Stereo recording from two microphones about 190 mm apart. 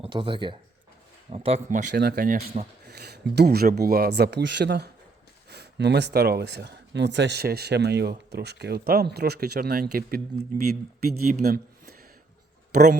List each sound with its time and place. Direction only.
0.0 s speech: 25° right (ahead or behind)
1.9 s speech: 60° right (ahead or behind)
11.0 s speech: 55° right (ahead or behind)
12.7 s speech: 40° right (ahead or behind)